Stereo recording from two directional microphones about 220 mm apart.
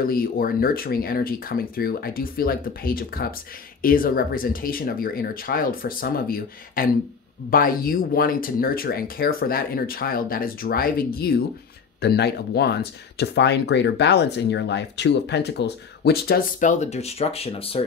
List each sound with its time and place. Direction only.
0.0 s speech: 40° left (ahead or behind)